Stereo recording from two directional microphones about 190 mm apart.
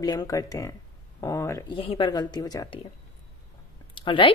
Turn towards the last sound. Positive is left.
turn(degrees=25)  # may be behind; listen again after turning